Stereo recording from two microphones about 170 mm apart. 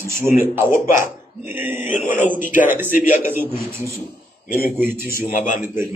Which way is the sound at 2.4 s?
50° left (ahead or behind).